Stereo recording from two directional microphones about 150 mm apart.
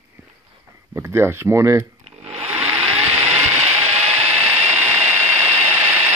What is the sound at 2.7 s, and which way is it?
Vehicle, 40° right (ahead or behind).